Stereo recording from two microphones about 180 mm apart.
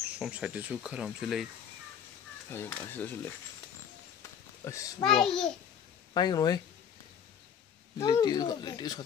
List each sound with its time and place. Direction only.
0.2 s speech: 5° right (ahead or behind)
2.5 s speech: 10° left (ahead or behind)
4.6 s speech: 15° left (ahead or behind)
5.0 s speech: centre (ahead or behind)
6.1 s speech: 20° left (ahead or behind)
8.0 s speech: 20° left (ahead or behind)